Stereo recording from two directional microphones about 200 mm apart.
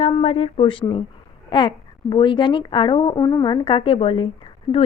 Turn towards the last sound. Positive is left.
turn(degrees=25)  # may be behind; listen again after turning